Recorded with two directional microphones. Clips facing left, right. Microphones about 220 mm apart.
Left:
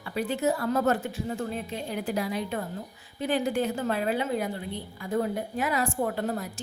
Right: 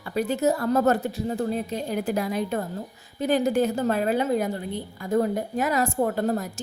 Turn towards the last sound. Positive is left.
turn(degrees=-40)  # may be behind; listen again after turning